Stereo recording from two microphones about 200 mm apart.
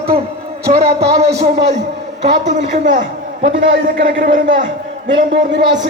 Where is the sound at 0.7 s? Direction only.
30° right (ahead or behind).